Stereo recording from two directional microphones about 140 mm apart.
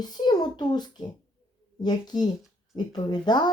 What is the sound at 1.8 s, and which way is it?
A child's voice, 30° left (ahead or behind).